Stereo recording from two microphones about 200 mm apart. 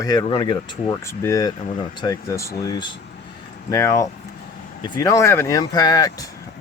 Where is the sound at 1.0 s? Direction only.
15° left (ahead or behind).